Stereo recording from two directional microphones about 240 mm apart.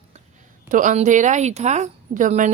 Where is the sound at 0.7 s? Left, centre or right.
Right.